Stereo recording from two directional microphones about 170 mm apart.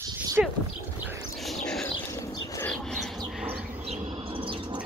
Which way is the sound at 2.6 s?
5° left (ahead or behind).